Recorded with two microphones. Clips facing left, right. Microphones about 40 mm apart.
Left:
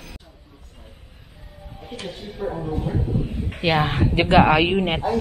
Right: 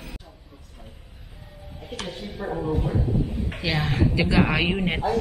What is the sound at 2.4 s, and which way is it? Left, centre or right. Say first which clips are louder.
Speech: left 3 dB; centre.